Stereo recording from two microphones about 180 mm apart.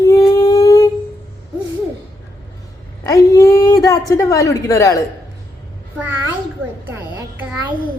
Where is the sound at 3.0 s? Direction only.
20° left (ahead or behind).